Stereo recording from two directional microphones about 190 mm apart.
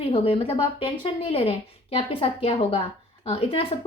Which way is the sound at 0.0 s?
30° left (ahead or behind).